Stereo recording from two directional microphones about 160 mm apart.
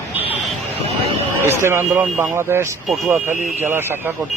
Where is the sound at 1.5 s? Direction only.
15° right (ahead or behind).